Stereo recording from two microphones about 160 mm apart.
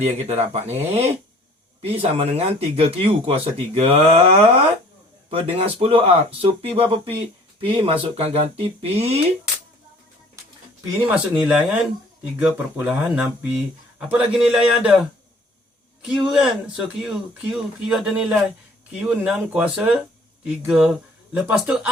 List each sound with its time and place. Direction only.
0.0 s speech: 40° right (ahead or behind)
1.8 s speech: 35° right (ahead or behind)
11.1 s speech: 5° right (ahead or behind)
16.0 s speech: 5° right (ahead or behind)